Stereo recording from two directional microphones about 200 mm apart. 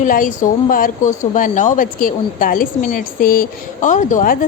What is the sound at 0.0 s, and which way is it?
A woman's voice, 45° left (ahead or behind).